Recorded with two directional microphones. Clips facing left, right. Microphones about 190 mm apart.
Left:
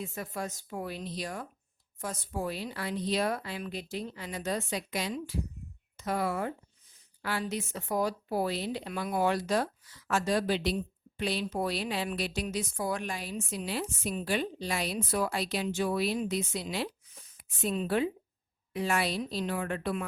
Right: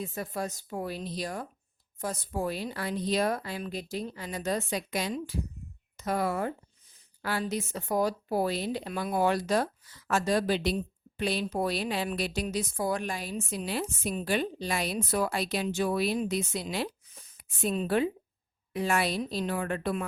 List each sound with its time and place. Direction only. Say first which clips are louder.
0.0 s a woman's voice: right 3 dB; 35° right (ahead or behind)